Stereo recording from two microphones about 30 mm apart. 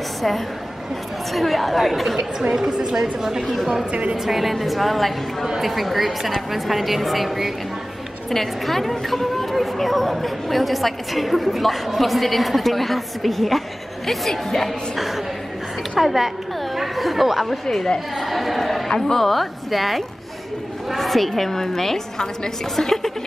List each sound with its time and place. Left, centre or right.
1.3 s a woman's voice: centre
2.5 s a woman's voice: centre
4.2 s a woman's voice: centre
8.3 s a woman's voice: centre
15.0 s a woman's voice: centre
17.5 s a woman's voice: centre
18.9 s speech: left
19.1 s a woman's voice: centre